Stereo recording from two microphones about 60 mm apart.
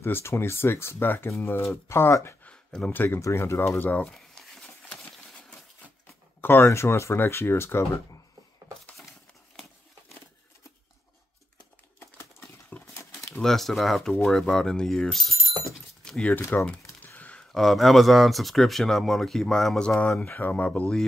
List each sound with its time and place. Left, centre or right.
0.0 s speech: left
2.9 s speech: left
3.2 s speech: left
4.0 s a sound: centre
6.4 s speech: left
6.7 s speech: left
12.0 s crumpling: left
12.7 s a sound: left
13.4 s speech: centre
16.0 s a sound: centre
16.5 s speech: left
17.0 s a sound: left
17.4 s speech: centre
20.2 s speech: left